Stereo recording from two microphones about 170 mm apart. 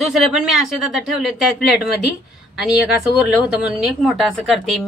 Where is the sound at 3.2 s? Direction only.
5° right (ahead or behind).